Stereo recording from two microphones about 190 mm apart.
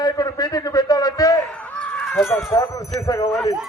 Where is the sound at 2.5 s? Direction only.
20° left (ahead or behind).